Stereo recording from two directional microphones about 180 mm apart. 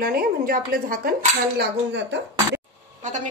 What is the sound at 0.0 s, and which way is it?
Speech, 55° right (ahead or behind).